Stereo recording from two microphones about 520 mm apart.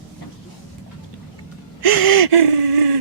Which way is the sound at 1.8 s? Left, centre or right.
Right.